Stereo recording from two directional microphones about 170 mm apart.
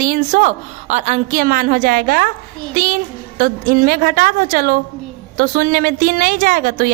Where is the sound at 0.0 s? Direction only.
50° right (ahead or behind).